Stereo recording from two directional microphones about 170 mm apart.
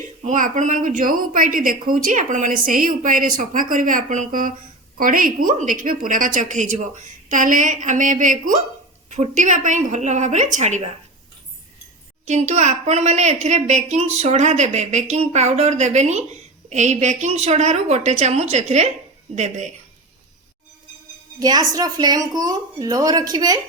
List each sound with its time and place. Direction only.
0.2 s speech: 50° right (ahead or behind)
12.2 s a woman's voice: 40° right (ahead or behind)
21.3 s a woman's voice: 20° right (ahead or behind)